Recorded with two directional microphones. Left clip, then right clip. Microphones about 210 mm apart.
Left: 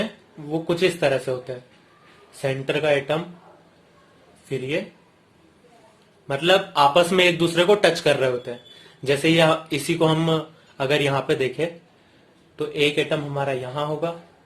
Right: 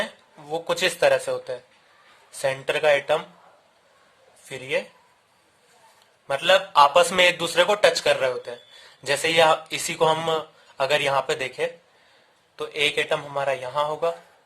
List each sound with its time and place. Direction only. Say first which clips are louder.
0.5 s a man's voice: left 2 dB; 45° right (ahead or behind)
4.4 s a man's voice: left 1 dB; 40° right (ahead or behind)
6.2 s a man's voice: even; 45° right (ahead or behind)